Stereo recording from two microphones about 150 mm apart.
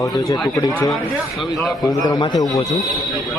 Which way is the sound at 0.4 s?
25° left (ahead or behind).